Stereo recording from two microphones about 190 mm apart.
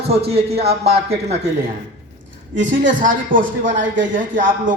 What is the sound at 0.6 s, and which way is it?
Speech, 55° right (ahead or behind).